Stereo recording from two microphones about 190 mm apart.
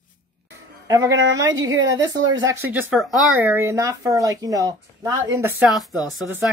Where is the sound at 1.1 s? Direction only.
75° right (ahead or behind).